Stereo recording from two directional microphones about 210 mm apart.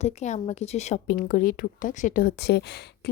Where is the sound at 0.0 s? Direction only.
30° left (ahead or behind).